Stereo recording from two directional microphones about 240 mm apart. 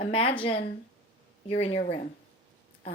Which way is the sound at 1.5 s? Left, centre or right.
Left.